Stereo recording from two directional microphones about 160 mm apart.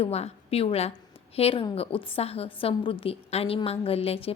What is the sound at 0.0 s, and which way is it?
A woman's voice, 40° left (ahead or behind).